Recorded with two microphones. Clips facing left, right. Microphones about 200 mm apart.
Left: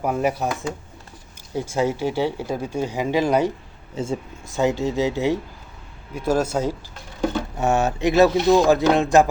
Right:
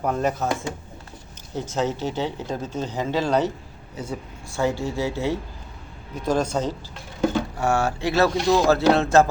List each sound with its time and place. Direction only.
0.0 s speech: 10° left (ahead or behind)
1.5 s speech: 10° left (ahead or behind)
3.9 s speech: 25° left (ahead or behind); by 7.3 s 5° left (ahead or behind)
7.5 s speech: 20° left (ahead or behind)